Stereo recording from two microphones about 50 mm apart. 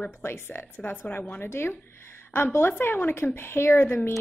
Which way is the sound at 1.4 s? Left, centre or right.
Left.